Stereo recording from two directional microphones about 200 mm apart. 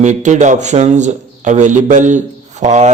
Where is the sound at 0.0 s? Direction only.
35° right (ahead or behind).